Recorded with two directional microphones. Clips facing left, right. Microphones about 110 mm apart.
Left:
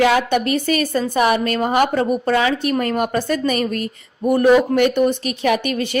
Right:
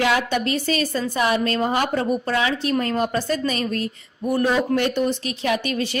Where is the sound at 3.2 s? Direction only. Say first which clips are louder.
Left 4 dB; 55° left (ahead or behind).